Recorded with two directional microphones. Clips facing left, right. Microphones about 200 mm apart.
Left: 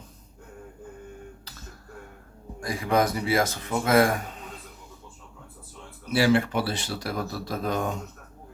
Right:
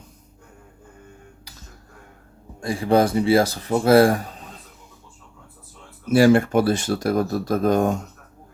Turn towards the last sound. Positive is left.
turn(degrees=-45)  # may be behind; listen again after turning